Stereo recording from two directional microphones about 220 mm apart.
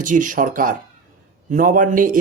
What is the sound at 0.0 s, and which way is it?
A man's voice, 35° right (ahead or behind).